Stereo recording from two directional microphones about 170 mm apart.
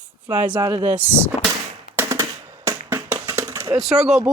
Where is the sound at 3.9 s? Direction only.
5° right (ahead or behind).